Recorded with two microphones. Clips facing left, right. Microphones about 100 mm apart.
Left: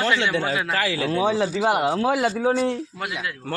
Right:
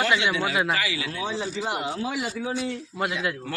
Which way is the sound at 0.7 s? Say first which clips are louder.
Left 5 dB; 45° left (ahead or behind).